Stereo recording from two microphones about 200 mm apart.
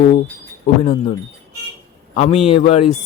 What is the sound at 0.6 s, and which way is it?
Speech, 30° left (ahead or behind).